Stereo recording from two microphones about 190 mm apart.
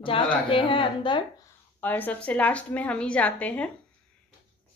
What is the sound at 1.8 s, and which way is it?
A woman's voice, 10° left (ahead or behind).